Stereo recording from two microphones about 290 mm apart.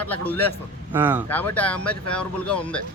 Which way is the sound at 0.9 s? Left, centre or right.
Centre.